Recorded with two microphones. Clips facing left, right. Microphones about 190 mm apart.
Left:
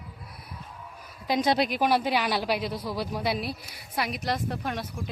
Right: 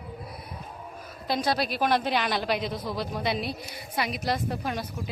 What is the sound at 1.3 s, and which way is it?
A woman's voice, 20° left (ahead or behind).